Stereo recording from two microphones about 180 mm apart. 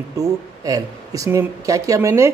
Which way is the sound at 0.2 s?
20° right (ahead or behind).